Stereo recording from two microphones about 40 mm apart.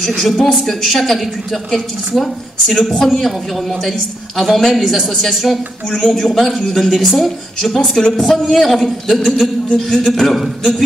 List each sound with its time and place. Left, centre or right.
0.0 s a woman's voice: centre
4.4 s a woman's voice: centre